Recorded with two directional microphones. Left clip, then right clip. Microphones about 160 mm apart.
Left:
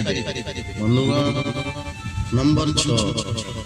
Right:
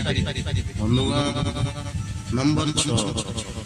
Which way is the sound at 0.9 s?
10° left (ahead or behind).